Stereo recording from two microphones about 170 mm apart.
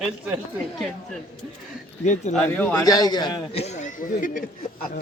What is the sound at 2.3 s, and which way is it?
Speech, 5° left (ahead or behind).